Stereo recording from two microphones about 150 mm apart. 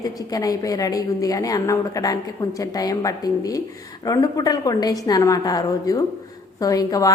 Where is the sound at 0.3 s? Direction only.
25° left (ahead or behind).